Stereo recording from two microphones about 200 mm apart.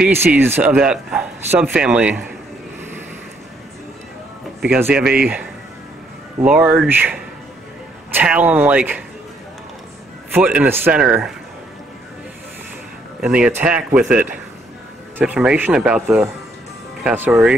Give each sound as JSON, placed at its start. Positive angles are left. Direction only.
{"t": 0.0, "sound": "speech", "side_deg": -10}
{"t": 4.6, "sound": "speech", "side_deg": -10}
{"t": 10.3, "sound": "speech", "side_deg": -10}
{"t": 13.2, "sound": "speech", "side_deg": -5}